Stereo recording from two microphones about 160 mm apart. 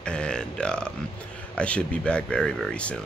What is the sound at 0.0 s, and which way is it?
Speech, 5° left (ahead or behind).